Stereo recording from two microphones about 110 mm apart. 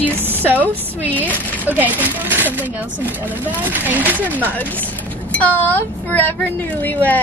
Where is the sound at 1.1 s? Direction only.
15° left (ahead or behind).